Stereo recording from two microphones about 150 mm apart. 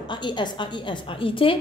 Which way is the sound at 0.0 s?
30° left (ahead or behind).